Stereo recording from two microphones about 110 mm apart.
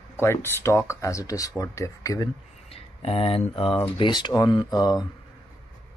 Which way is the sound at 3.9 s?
45° left (ahead or behind).